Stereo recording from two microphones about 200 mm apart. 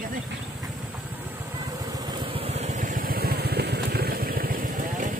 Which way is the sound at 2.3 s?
30° right (ahead or behind).